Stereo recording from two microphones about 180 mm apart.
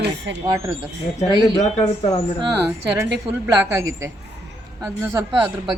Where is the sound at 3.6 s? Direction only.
15° right (ahead or behind).